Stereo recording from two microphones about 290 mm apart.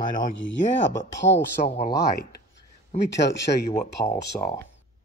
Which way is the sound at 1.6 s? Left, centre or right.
Left.